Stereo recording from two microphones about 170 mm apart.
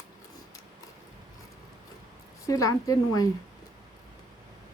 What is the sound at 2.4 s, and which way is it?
Speech, 20° left (ahead or behind).